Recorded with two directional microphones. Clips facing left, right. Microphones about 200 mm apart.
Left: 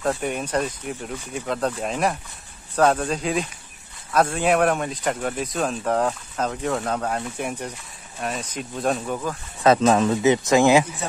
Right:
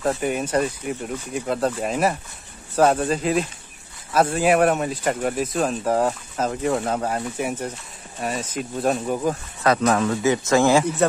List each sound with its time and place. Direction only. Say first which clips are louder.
0.0 s speech: right 2 dB; 5° right (ahead or behind)
9.0 s speech: right 4 dB; 15° right (ahead or behind)
9.6 s speech: left 3 dB; 20° left (ahead or behind)